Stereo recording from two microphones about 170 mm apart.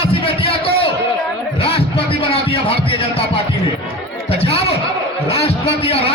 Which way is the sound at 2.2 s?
35° left (ahead or behind).